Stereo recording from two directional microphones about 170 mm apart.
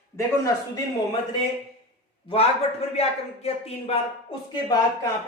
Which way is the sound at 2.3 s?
35° left (ahead or behind).